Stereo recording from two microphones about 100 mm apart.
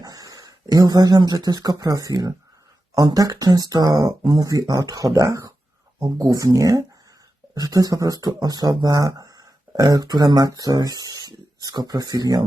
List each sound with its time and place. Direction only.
0.0 s speech: 40° right (ahead or behind)